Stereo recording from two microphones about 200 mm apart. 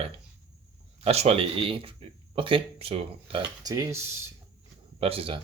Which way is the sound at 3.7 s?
15° right (ahead or behind).